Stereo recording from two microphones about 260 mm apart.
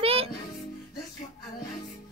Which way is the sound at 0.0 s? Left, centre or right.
Right.